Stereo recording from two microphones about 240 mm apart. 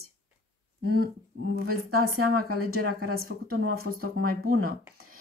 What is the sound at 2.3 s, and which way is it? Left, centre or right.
Speech, right.